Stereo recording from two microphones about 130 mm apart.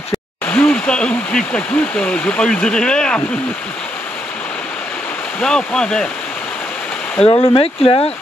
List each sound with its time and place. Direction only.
0.5 s speech: 15° left (ahead or behind)
5.4 s speech: 5° left (ahead or behind)
7.2 s speech: 40° left (ahead or behind)